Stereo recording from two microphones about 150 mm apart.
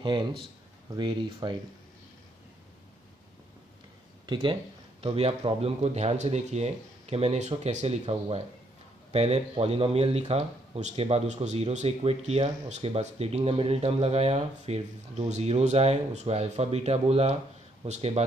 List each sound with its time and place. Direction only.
0.0 s a man's voice: 30° right (ahead or behind)
4.3 s speech: 35° right (ahead or behind)
9.1 s speech: 45° right (ahead or behind)